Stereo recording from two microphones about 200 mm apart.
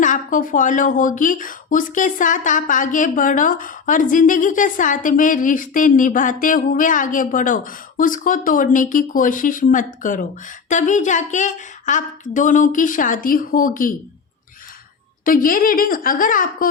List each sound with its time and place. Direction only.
0.0 s speech: 40° left (ahead or behind)
15.2 s a woman's voice: 45° left (ahead or behind)